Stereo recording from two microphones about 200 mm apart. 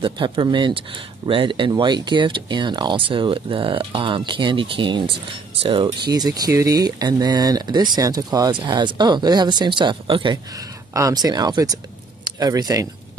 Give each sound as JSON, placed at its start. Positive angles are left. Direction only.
{"t": 0.0, "sound": "speech", "side_deg": -25}